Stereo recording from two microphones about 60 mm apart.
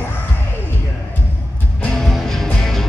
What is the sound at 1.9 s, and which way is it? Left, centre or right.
Music, centre.